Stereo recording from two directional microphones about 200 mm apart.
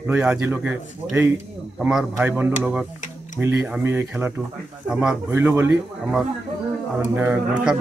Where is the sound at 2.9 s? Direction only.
40° left (ahead or behind).